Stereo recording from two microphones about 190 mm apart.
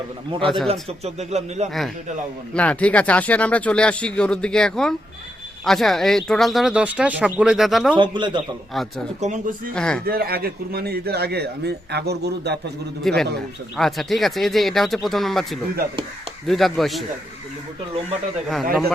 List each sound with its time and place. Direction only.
0.4 s speech: centre (ahead or behind)
0.7 s speech: 35° right (ahead or behind)
2.5 s speech: 5° left (ahead or behind)
7.9 s a man's voice: 25° right (ahead or behind)
9.2 s a man's voice: 45° right (ahead or behind)
9.7 s speech: 5° left (ahead or behind)
10.1 s a man's voice: 55° right (ahead or behind)
13.0 s speech: centre (ahead or behind)
18.4 s speech: centre (ahead or behind)